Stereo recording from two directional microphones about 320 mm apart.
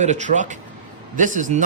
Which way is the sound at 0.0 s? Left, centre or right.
Right.